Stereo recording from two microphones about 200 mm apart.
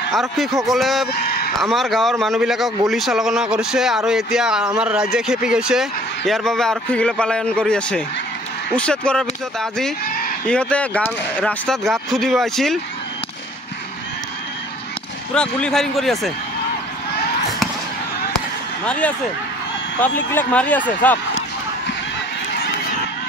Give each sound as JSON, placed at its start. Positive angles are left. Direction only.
{"t": 0.1, "sound": "speech", "side_deg": 0}
{"t": 10.0, "sound": "a sound", "side_deg": 50}
{"t": 10.4, "sound": "speech", "side_deg": 5}
{"t": 15.3, "sound": "speech", "side_deg": 5}
{"t": 18.9, "sound": "speech", "side_deg": 5}